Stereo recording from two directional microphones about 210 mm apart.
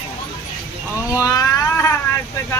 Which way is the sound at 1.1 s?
15° left (ahead or behind).